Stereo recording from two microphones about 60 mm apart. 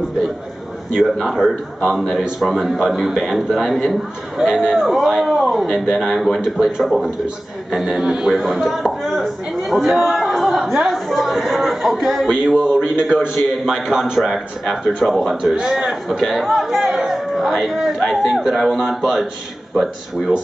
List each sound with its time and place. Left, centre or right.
1.2 s a man's voice: centre
8.0 s speech: centre
8.3 s a man's voice: centre